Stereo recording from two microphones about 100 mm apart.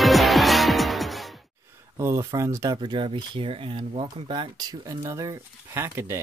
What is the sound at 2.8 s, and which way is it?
Speech, 55° right (ahead or behind).